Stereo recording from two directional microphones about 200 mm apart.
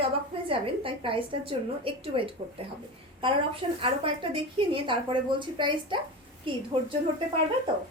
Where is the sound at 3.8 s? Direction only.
25° right (ahead or behind).